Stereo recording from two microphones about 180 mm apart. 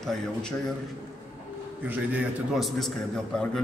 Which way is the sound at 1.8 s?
5° right (ahead or behind).